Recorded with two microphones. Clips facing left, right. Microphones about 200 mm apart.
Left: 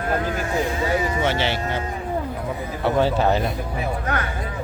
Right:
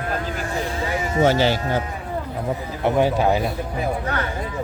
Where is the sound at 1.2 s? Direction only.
40° right (ahead or behind).